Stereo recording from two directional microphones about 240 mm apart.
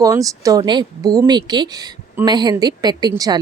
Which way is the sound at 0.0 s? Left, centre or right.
Centre.